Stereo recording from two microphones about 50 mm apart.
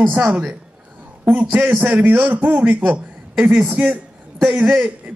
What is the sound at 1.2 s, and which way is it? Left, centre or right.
Speech, right.